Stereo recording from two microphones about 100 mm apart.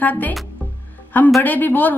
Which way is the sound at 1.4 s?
20° left (ahead or behind).